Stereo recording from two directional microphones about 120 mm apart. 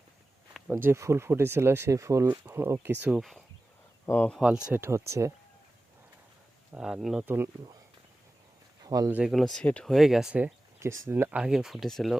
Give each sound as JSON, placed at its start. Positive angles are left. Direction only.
{"t": 0.7, "sound": "speech", "side_deg": -20}
{"t": 3.2, "sound": "speech", "side_deg": 0}
{"t": 4.0, "sound": "speech", "side_deg": 15}
{"t": 4.4, "sound": "speech", "side_deg": -10}
{"t": 4.8, "sound": "speech", "side_deg": -25}
{"t": 6.7, "sound": "speech", "side_deg": -5}
{"t": 7.3, "sound": "speech", "side_deg": -20}
{"t": 8.8, "sound": "a sound", "side_deg": -30}
{"t": 9.0, "sound": "speech", "side_deg": -15}
{"t": 9.3, "sound": "speech", "side_deg": 5}
{"t": 9.9, "sound": "speech", "side_deg": 0}
{"t": 10.8, "sound": "a sound", "side_deg": -20}
{"t": 11.1, "sound": "speech", "side_deg": -15}